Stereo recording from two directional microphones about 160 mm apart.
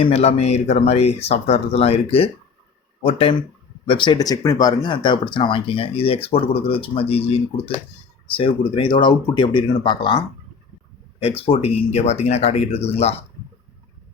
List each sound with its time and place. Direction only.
0.0 s speech: 40° left (ahead or behind)